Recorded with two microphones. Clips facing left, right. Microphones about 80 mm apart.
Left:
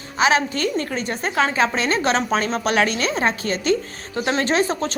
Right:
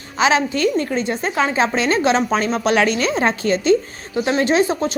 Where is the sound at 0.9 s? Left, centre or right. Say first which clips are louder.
Right 2 dB; right.